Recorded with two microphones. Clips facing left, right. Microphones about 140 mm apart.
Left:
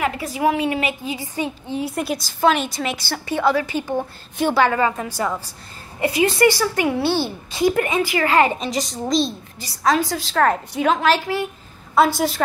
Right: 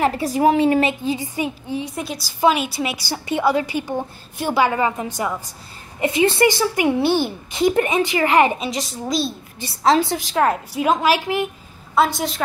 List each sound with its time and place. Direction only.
0.0 s a woman's voice: 35° right (ahead or behind)
1.3 s a woman's voice: 15° right (ahead or behind)
1.8 s a woman's voice: 5° left (ahead or behind)
2.1 s a woman's voice: 10° right (ahead or behind)
8.5 s a woman's voice: centre (ahead or behind)
9.6 s speech: 25° right (ahead or behind)
10.4 s a woman's voice: 5° right (ahead or behind)
11.9 s a woman's voice: centre (ahead or behind)